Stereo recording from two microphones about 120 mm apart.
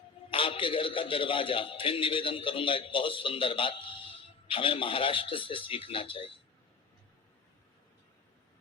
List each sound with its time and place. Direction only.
0.3 s a man's voice: 50° left (ahead or behind)